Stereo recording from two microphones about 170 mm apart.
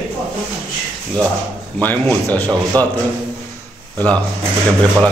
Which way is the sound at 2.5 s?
20° right (ahead or behind).